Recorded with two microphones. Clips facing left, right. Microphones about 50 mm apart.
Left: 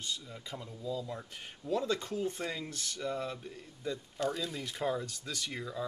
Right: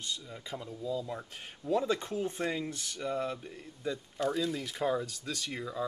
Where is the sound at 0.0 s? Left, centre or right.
Centre.